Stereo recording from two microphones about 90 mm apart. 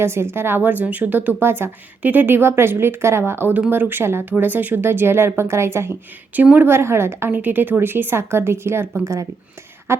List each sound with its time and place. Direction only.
0.0 s a woman's voice: 25° right (ahead or behind)
6.3 s a woman's voice: 15° right (ahead or behind)
9.9 s a woman's voice: 30° right (ahead or behind)